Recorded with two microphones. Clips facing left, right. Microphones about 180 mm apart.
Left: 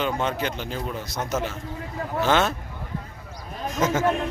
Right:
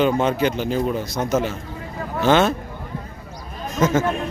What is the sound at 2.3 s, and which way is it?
Speech, centre (ahead or behind).